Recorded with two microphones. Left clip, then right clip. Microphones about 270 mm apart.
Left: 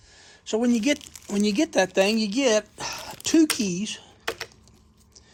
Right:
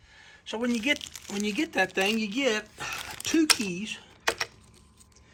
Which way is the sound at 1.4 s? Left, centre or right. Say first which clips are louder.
Left 5 dB; centre.